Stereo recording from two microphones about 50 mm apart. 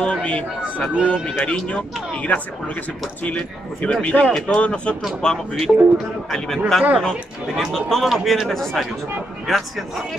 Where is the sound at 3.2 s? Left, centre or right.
Left.